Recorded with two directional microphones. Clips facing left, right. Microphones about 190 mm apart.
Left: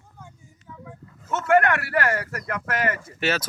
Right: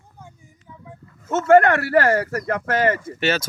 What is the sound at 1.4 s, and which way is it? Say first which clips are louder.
Speech: right 6 dB; 30° right (ahead or behind).